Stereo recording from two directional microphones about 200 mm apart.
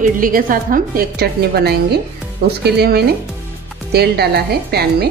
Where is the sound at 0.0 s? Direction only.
45° right (ahead or behind).